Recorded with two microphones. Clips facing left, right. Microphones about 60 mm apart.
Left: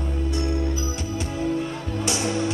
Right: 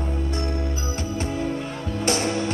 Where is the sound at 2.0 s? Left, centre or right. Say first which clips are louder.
Right 2 dB; right.